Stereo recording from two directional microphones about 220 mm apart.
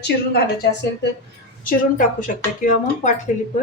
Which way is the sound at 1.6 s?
35° left (ahead or behind).